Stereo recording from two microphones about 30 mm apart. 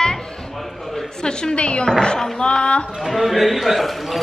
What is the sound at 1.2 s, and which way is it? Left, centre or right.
A woman's voice, left.